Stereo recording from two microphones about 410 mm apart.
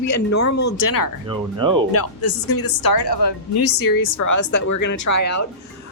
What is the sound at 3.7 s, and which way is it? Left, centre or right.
A woman's voice, left.